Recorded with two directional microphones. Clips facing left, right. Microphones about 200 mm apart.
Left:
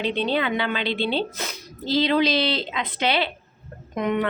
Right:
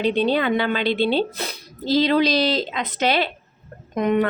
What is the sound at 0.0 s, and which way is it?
A woman's voice, 40° right (ahead or behind).